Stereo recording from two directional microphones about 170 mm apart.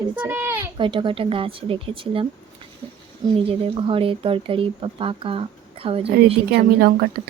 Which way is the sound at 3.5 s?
30° right (ahead or behind).